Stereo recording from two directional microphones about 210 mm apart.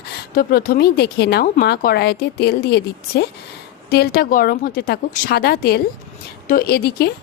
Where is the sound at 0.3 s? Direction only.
45° left (ahead or behind).